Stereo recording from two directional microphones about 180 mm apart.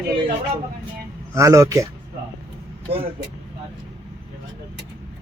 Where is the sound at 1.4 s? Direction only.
15° right (ahead or behind).